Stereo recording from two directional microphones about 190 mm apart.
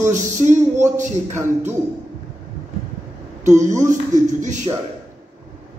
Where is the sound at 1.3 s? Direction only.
10° right (ahead or behind).